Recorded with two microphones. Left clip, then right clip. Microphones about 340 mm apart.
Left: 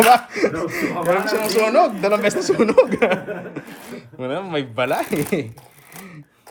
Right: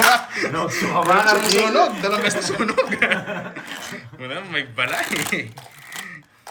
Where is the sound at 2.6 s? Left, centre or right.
Centre.